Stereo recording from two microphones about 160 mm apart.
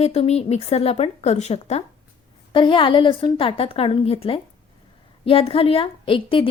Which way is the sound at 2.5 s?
30° left (ahead or behind).